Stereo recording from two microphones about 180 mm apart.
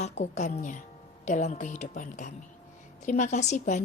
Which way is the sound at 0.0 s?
40° left (ahead or behind).